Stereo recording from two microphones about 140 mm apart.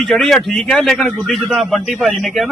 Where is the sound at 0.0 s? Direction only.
Centre (ahead or behind).